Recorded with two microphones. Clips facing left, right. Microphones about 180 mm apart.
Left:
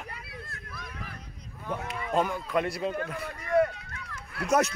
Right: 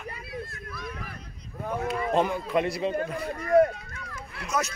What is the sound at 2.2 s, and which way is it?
Speech, 15° right (ahead or behind).